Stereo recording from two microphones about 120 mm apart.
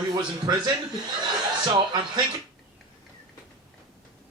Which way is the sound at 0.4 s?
35° right (ahead or behind).